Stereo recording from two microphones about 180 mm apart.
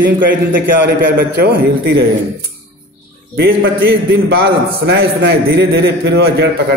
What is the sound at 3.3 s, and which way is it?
A man's voice, 65° right (ahead or behind).